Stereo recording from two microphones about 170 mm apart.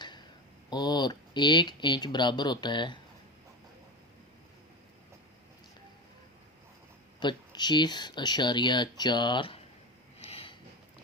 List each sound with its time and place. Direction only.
0.7 s speech: 25° left (ahead or behind)
7.2 s speech: 25° left (ahead or behind)
10.2 s a sound: 35° left (ahead or behind)